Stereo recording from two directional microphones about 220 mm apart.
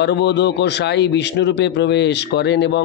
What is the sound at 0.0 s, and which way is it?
Speech, 50° left (ahead or behind).